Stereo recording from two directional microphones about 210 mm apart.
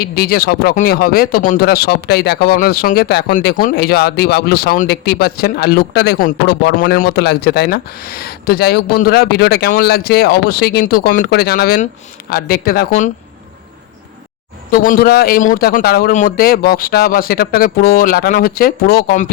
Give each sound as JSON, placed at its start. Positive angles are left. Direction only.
{"t": 0.0, "sound": "speech", "side_deg": 45}
{"t": 14.7, "sound": "speech", "side_deg": 40}